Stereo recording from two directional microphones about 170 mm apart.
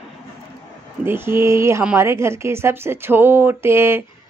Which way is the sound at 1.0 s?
15° right (ahead or behind).